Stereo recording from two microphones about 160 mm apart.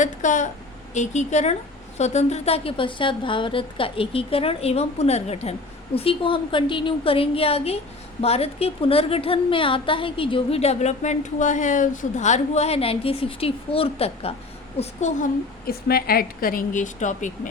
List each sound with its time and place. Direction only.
0.0 s a woman's voice: 50° left (ahead or behind)
15.6 s a woman's voice: 70° left (ahead or behind); by 17.5 s 50° left (ahead or behind)